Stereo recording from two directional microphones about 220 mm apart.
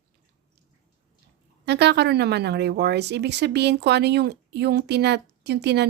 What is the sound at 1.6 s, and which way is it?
Speech, 50° right (ahead or behind).